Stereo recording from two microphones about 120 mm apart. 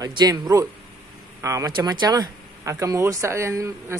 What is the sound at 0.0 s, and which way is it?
A man's voice, 35° right (ahead or behind).